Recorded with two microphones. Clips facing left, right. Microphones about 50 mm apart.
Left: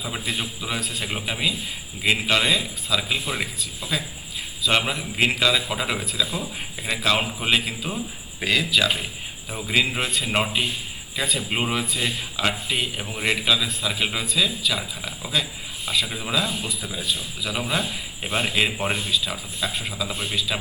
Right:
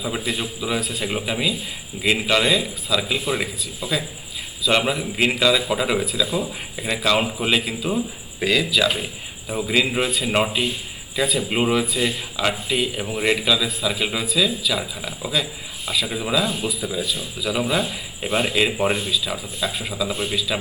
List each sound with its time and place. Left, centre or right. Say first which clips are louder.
0.0 s speech: right 3 dB; centre
4.9 s speech: right 2 dB; centre